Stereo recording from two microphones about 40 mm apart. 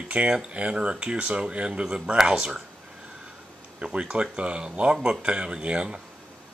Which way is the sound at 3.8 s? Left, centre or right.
Right.